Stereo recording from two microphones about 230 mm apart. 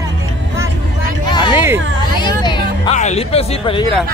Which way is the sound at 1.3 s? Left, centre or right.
Centre.